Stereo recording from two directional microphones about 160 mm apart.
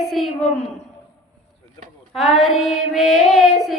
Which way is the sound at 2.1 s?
Centre (ahead or behind).